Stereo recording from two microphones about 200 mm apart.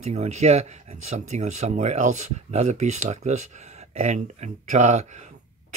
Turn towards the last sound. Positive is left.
turn(degrees=-35)  # may be behind; listen again after turning